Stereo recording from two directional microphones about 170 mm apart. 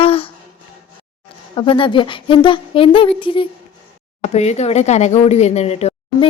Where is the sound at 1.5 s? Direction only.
30° left (ahead or behind).